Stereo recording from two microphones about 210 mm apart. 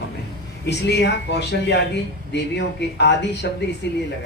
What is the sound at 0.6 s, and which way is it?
A man's voice, 55° left (ahead or behind).